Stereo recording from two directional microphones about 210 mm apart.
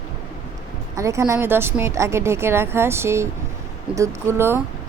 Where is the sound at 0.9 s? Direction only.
15° right (ahead or behind).